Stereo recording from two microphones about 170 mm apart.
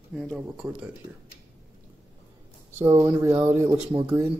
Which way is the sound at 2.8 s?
20° right (ahead or behind).